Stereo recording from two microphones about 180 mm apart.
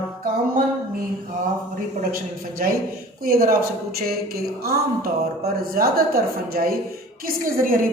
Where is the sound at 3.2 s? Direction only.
55° right (ahead or behind).